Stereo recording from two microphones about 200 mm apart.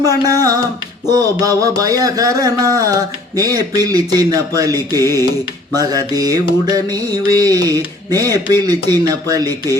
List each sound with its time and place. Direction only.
0.0 s speech: 20° right (ahead or behind)
1.0 s a sound: 20° right (ahead or behind)
5.7 s speech: 20° right (ahead or behind)